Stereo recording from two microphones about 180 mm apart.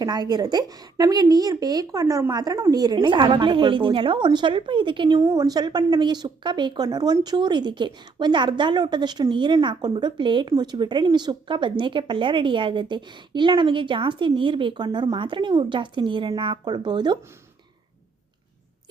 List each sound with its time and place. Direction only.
0.0 s a woman's voice: 25° right (ahead or behind)